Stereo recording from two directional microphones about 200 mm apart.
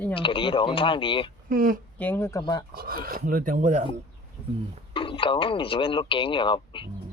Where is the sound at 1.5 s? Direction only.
45° right (ahead or behind).